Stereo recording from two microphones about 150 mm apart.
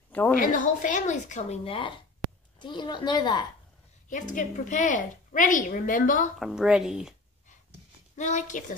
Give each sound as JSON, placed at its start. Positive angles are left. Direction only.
{"t": 0.4, "sound": "a woman's voice", "side_deg": 60}
{"t": 4.1, "sound": "a woman's voice", "side_deg": 60}
{"t": 6.4, "sound": "a woman's voice", "side_deg": -5}
{"t": 8.2, "sound": "a woman's voice", "side_deg": 55}